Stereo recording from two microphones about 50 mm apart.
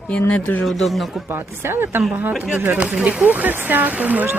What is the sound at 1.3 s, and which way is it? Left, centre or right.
Speech, right.